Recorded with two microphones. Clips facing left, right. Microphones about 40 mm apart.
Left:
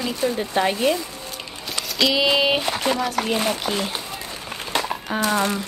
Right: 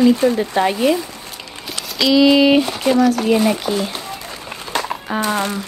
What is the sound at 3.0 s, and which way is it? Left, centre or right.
Speech, centre.